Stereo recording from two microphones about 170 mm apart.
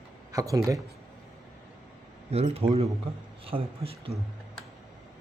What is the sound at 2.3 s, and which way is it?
Speech, 35° right (ahead or behind).